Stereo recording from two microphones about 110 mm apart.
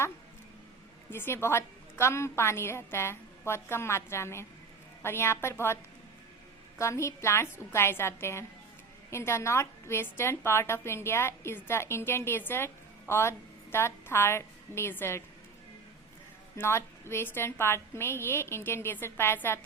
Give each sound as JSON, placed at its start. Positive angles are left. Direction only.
{"t": 1.1, "sound": "a woman's voice", "side_deg": 20}
{"t": 16.6, "sound": "a woman's voice", "side_deg": 20}